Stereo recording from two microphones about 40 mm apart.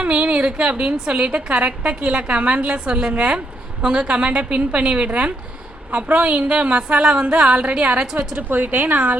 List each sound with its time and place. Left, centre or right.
0.0 s a woman's voice: right
8.4 s a woman's voice: right